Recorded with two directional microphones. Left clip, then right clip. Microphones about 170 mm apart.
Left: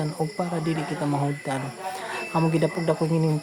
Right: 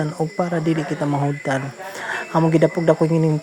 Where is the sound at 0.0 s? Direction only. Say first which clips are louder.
Right 5 dB; 30° right (ahead or behind).